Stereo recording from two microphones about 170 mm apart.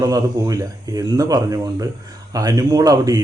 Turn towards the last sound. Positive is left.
turn(degrees=-20)  # may be behind; listen again after turning